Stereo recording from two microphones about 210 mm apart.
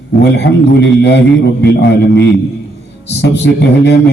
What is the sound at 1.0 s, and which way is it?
A man's voice, 55° left (ahead or behind).